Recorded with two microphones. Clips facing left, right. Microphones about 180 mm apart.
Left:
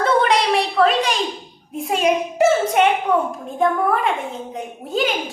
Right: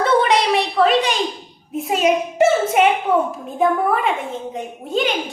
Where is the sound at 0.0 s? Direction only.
Centre (ahead or behind).